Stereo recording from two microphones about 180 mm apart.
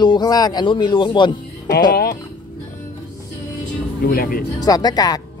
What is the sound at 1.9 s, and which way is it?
Speech, 60° left (ahead or behind).